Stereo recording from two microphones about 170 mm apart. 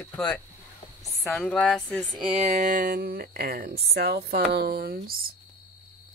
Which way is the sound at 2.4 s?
50° right (ahead or behind).